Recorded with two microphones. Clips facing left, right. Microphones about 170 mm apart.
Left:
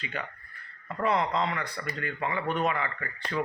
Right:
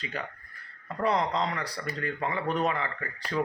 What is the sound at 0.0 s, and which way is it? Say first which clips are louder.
Speech: even; 35° right (ahead or behind).